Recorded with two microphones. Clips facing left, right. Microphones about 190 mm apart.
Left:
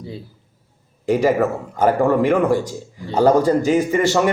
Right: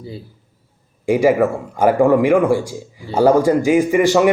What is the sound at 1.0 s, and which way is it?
A man's voice, 10° right (ahead or behind).